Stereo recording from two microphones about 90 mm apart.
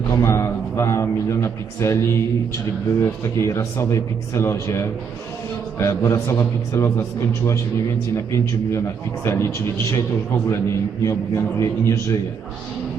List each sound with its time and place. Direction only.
0.2 s a man's voice: 30° left (ahead or behind)
8.1 s a man's voice: 35° left (ahead or behind)